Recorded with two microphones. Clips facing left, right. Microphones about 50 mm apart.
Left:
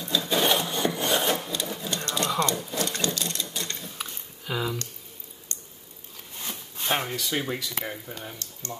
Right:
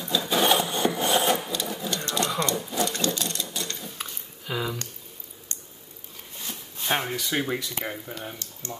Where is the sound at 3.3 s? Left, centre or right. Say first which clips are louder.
Right 1 dB; centre.